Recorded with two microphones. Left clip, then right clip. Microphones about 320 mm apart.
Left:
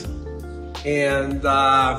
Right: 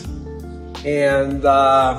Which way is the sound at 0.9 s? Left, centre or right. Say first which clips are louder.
Right 4 dB; right.